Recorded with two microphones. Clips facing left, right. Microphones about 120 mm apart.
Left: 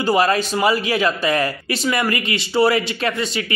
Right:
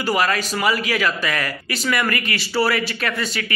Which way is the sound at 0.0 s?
30° left (ahead or behind).